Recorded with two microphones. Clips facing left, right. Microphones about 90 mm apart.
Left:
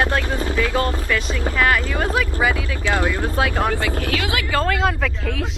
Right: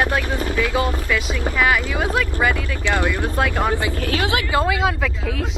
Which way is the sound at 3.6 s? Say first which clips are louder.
Even; 20° right (ahead or behind).